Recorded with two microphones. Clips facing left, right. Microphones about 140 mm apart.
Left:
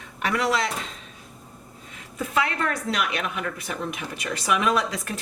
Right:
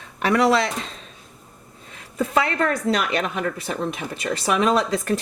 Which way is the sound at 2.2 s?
35° right (ahead or behind).